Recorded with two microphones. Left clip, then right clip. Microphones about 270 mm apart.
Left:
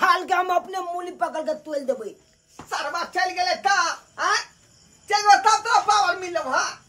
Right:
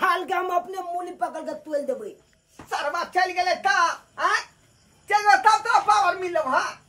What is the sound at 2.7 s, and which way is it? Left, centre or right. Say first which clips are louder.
Speech: right 1 dB; centre.